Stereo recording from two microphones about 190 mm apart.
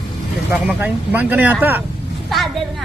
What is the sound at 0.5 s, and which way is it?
Speech, 5° right (ahead or behind).